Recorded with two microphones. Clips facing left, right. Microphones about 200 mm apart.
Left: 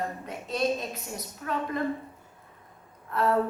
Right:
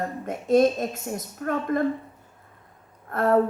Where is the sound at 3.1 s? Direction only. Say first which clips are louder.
Right 3 dB; 50° right (ahead or behind).